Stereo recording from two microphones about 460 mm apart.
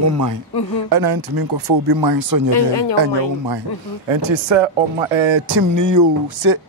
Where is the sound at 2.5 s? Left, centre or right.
Left.